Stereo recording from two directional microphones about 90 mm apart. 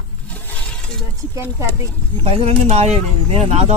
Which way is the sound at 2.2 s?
90° right.